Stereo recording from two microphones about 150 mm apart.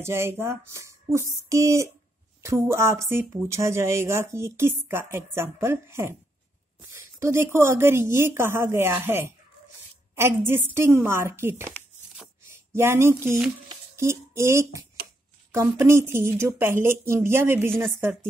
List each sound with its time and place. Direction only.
0.0 s speech: 15° right (ahead or behind)
17.6 s a woman's voice: 5° left (ahead or behind)